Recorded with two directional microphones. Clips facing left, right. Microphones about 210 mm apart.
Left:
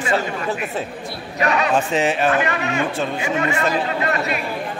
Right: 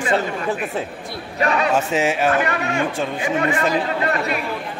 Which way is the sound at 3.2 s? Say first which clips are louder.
Right 3 dB; 30° right (ahead or behind).